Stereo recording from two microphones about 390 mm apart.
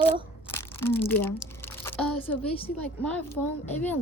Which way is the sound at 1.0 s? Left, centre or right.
Centre.